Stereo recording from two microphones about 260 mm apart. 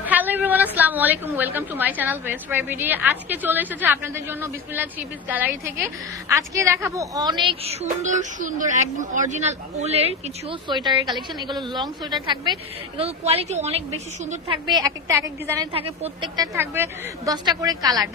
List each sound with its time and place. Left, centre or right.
0.0 s a woman's voice: centre
15.7 s a woman's voice: right